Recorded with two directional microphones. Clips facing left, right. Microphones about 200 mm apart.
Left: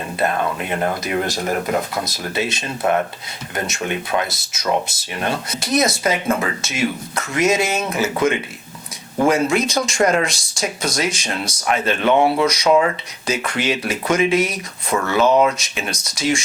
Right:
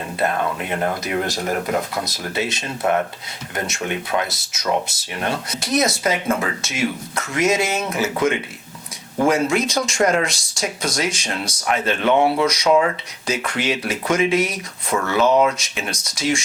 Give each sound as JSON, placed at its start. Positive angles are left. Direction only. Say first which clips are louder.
{"t": 0.2, "sound": "speech", "louder": "left 1 dB", "side_deg": 10}